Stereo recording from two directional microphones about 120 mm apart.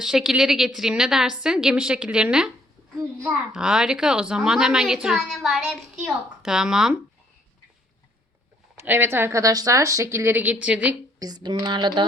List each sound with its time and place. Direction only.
0.0 s a woman's voice: 5° right (ahead or behind)
3.5 s a woman's voice: 5° right (ahead or behind)
8.8 s speech: 20° right (ahead or behind)
11.2 s speech: 35° right (ahead or behind)